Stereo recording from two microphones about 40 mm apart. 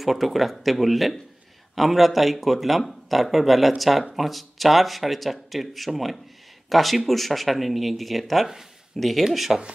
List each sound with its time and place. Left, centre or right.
0.0 s speech: centre